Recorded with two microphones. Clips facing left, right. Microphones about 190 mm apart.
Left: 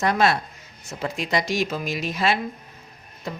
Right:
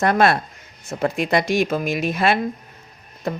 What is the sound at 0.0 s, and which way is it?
Speech, 55° right (ahead or behind).